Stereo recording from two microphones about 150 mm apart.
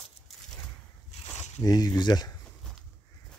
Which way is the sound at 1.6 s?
25° left (ahead or behind).